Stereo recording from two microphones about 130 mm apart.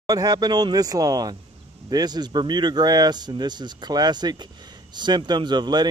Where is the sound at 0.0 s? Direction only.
30° right (ahead or behind).